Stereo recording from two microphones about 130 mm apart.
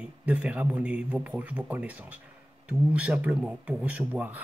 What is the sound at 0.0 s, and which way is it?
Speech, 10° right (ahead or behind).